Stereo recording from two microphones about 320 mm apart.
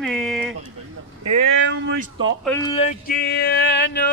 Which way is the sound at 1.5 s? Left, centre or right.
Right.